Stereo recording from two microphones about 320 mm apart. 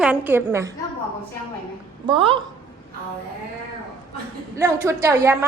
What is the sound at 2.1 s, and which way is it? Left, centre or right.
Speech, centre.